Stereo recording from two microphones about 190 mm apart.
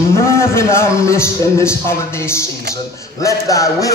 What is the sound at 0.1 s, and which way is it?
A man's voice, 15° left (ahead or behind).